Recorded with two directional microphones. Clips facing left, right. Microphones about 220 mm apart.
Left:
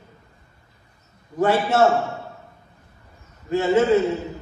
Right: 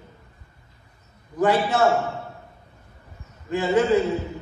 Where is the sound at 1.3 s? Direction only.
25° left (ahead or behind).